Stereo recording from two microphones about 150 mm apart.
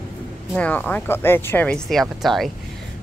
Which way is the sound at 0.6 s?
10° left (ahead or behind).